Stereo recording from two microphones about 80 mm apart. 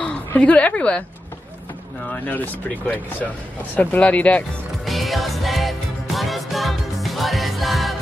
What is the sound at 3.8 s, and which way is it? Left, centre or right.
Speech, centre.